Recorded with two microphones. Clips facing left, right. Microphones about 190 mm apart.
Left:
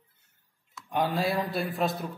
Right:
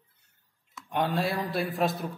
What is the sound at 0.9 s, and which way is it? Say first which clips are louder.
Speech: left 1 dB; centre (ahead or behind).